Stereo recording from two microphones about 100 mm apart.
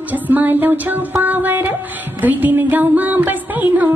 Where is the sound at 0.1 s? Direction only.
15° right (ahead or behind).